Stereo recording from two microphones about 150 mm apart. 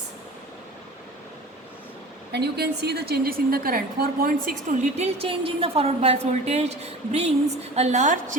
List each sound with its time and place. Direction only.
2.4 s a woman's voice: 90° right; by 8.4 s 60° right (ahead or behind)